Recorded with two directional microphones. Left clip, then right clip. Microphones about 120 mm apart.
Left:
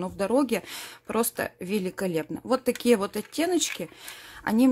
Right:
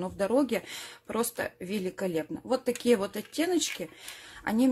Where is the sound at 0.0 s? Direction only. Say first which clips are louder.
Left 2 dB; 25° left (ahead or behind).